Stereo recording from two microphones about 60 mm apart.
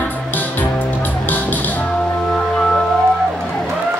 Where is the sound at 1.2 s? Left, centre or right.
Left.